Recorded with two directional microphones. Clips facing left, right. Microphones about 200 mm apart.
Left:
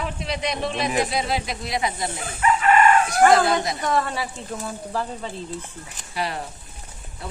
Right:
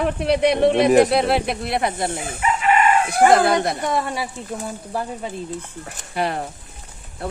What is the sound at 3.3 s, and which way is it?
Speech, 60° right (ahead or behind).